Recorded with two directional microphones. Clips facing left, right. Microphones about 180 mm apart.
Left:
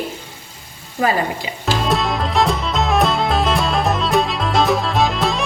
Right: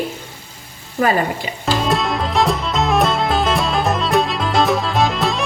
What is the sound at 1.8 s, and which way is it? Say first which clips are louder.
Music: even; centre (ahead or behind).